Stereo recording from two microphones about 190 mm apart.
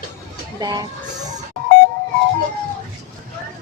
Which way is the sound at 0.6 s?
20° right (ahead or behind).